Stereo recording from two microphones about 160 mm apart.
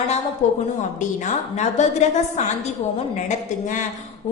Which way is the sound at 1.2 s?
45° left (ahead or behind).